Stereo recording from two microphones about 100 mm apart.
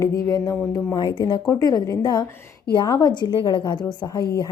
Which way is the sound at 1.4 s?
40° left (ahead or behind).